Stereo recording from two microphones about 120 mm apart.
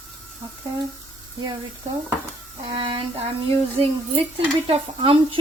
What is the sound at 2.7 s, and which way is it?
Speech, 40° right (ahead or behind).